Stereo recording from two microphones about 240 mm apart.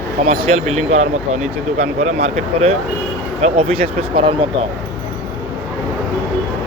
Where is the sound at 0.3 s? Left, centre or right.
Right.